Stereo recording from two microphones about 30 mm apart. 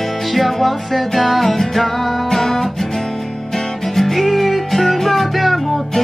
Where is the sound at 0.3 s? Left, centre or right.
Centre.